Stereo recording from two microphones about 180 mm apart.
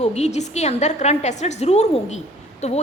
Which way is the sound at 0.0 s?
40° left (ahead or behind).